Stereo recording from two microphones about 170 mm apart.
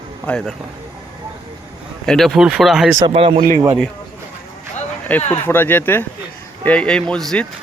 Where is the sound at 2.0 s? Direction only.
Centre (ahead or behind).